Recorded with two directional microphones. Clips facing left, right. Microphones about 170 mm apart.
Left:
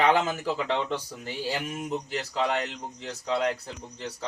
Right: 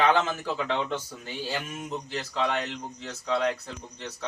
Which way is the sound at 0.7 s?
30° left (ahead or behind).